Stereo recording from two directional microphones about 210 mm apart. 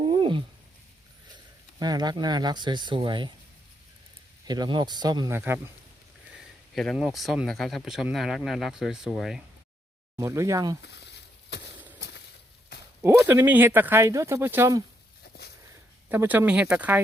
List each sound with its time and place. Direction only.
0.0 s a sound: 20° right (ahead or behind)
1.8 s speech: 20° right (ahead or behind)
4.4 s speech: 20° right (ahead or behind)
6.7 s speech: centre (ahead or behind)
10.2 s speech: 15° right (ahead or behind)
10.8 s a sound: 55° left (ahead or behind)
13.0 s speech: 10° right (ahead or behind)
16.0 s speech: 10° right (ahead or behind)